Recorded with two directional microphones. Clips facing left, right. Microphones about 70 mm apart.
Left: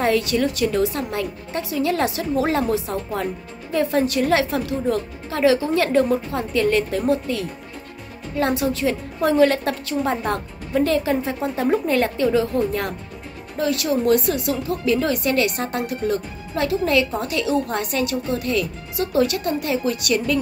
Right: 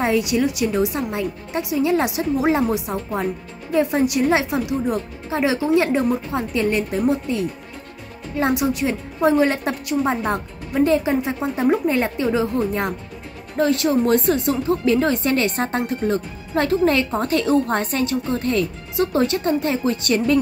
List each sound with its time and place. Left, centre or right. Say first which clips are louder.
0.0 s speech: even; centre; by 20.3 s right